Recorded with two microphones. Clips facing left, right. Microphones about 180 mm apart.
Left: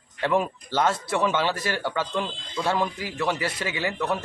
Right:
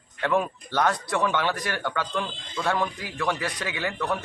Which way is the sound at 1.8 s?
10° left (ahead or behind).